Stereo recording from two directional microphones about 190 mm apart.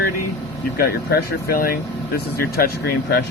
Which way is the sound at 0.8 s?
55° left (ahead or behind).